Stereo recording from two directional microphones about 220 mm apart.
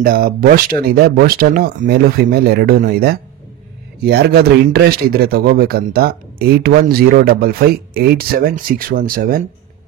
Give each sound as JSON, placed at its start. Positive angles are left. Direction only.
{"t": 0.0, "sound": "speech", "side_deg": -40}